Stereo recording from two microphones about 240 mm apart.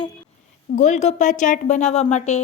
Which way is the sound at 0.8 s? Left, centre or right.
Left.